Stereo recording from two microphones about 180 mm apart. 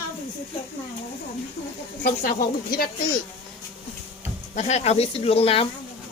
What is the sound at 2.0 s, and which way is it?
Speech, 55° left (ahead or behind).